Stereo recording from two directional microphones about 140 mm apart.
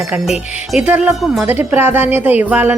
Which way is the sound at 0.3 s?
5° right (ahead or behind).